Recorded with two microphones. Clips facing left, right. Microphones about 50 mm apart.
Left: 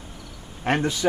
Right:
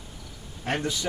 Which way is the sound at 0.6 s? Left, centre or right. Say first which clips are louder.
Left 6 dB; left.